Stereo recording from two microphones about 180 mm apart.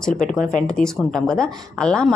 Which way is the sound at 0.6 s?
5° left (ahead or behind).